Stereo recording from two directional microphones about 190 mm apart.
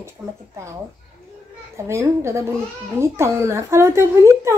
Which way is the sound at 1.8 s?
15° right (ahead or behind).